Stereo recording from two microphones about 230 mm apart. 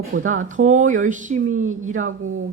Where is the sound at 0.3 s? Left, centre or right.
Right.